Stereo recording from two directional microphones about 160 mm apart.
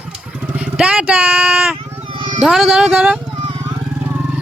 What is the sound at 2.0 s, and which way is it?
Cat, 30° right (ahead or behind).